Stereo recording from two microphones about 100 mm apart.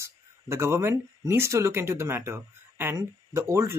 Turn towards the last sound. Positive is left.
turn(degrees=-30)  # may be behind; listen again after turning